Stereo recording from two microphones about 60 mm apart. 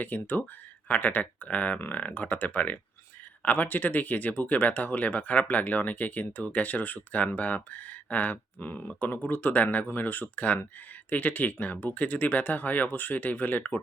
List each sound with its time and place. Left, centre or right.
0.0 s speech: left